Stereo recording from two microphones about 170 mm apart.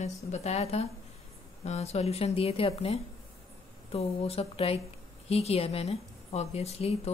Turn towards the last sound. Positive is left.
turn(degrees=35)  # may be behind; listen again after turning